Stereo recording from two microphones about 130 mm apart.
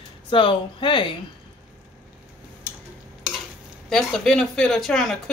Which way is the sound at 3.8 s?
5° left (ahead or behind).